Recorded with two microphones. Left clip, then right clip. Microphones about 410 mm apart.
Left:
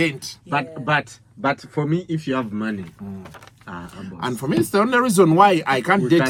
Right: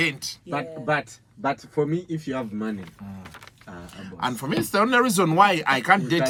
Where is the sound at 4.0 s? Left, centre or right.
Centre.